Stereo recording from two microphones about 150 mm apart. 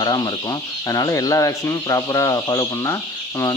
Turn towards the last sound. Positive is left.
turn(degrees=20)  # may be behind; listen again after turning